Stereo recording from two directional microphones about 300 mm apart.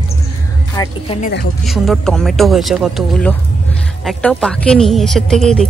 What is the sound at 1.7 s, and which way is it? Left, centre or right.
Speech, centre.